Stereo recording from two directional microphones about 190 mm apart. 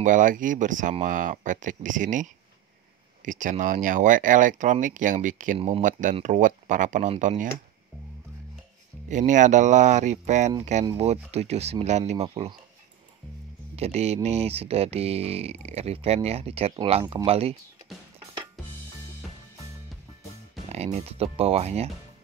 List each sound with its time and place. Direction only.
0.0 s speech: 45° right (ahead or behind)
9.1 s speech: 40° right (ahead or behind)
13.7 s speech: 35° right (ahead or behind)
20.7 s speech: 35° right (ahead or behind)